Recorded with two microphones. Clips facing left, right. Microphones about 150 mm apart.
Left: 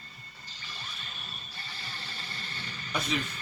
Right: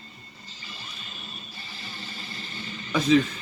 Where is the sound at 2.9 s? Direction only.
90° right.